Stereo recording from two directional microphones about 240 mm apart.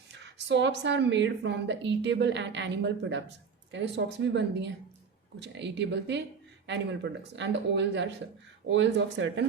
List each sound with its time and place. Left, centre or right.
0.1 s a woman's voice: right